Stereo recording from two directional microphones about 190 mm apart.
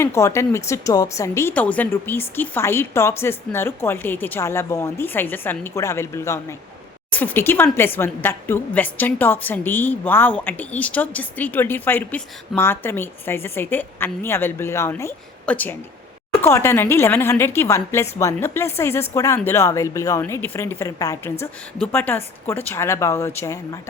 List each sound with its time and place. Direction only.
0.0 s a woman's voice: 15° left (ahead or behind)